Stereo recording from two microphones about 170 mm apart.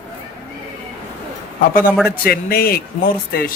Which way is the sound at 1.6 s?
55° left (ahead or behind).